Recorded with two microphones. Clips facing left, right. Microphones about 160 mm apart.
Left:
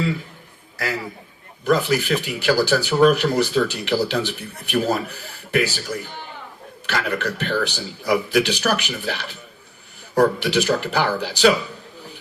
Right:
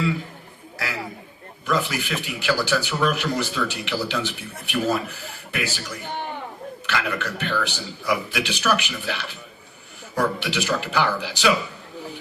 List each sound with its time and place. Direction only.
1.6 s speech: 40° left (ahead or behind)
6.1 s chink: 55° right (ahead or behind)
6.8 s speech: 45° left (ahead or behind)